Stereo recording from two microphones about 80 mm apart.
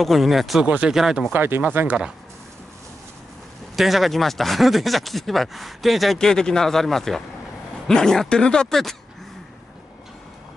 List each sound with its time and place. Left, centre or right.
0.0 s speech: centre
0.7 s speech: centre
1.3 s speech: right
3.7 s speech: centre